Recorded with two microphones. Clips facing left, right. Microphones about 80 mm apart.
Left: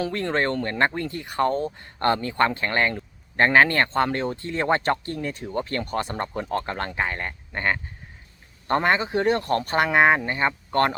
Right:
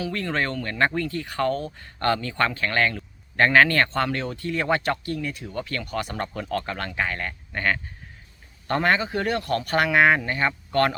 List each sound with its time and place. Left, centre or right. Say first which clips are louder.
0.3 s speech: left 4 dB; left